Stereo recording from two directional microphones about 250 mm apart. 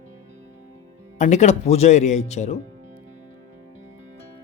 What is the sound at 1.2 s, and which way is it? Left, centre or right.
Speech, left.